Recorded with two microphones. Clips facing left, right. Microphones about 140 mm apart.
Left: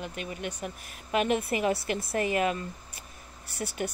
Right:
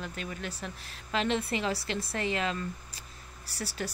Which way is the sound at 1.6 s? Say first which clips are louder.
Left 4 dB; 25° left (ahead or behind).